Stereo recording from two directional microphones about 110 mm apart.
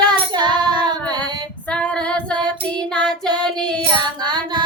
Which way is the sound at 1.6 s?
10° left (ahead or behind).